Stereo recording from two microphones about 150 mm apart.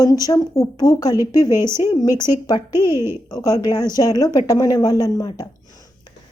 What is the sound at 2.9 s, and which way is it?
Speech, 15° right (ahead or behind).